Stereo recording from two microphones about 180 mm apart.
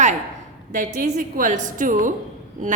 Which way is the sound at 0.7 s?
50° right (ahead or behind).